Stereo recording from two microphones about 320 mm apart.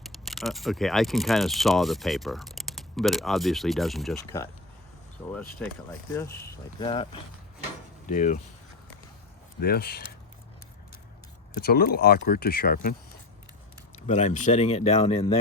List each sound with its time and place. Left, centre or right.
0.0 s speech: centre
8.1 s speech: left
9.6 s speech: left
11.5 s speech: left
14.1 s speech: left